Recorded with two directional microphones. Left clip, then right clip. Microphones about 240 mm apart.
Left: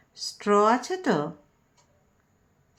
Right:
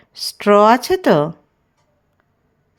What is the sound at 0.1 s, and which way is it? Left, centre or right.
Speech, right.